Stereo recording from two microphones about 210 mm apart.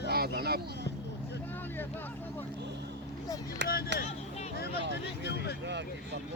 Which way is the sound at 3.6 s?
55° right (ahead or behind).